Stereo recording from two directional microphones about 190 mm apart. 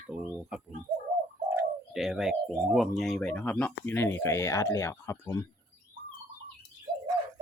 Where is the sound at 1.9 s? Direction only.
5° right (ahead or behind); by 5.4 s 15° left (ahead or behind).